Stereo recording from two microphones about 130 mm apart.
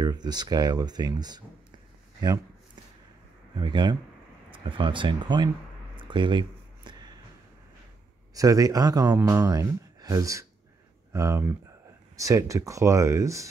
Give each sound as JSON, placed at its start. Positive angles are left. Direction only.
{"t": 0.0, "sound": "speech", "side_deg": -30}
{"t": 3.5, "sound": "speech", "side_deg": -35}
{"t": 5.9, "sound": "a sound", "side_deg": -40}
{"t": 8.4, "sound": "speech", "side_deg": -25}